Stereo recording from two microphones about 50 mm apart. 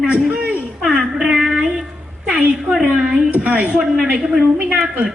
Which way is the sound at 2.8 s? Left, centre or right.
Centre.